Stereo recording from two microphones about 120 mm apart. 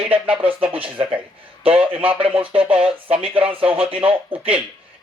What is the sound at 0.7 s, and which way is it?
Speech, 50° right (ahead or behind).